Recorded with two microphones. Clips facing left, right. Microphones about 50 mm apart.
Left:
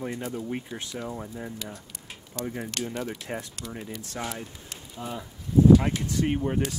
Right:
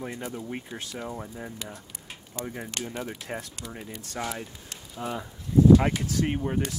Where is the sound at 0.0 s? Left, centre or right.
Centre.